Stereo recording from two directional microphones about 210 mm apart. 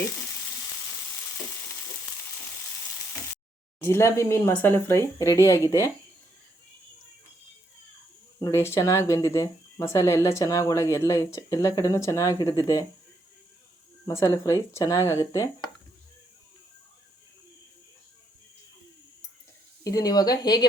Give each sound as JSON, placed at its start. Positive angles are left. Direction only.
{"t": 3.8, "sound": "speech", "side_deg": 15}
{"t": 8.4, "sound": "speech", "side_deg": 15}
{"t": 14.0, "sound": "speech", "side_deg": 15}
{"t": 19.8, "sound": "speech", "side_deg": 15}